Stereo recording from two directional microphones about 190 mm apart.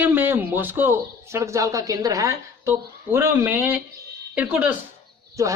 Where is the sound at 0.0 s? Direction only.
10° right (ahead or behind).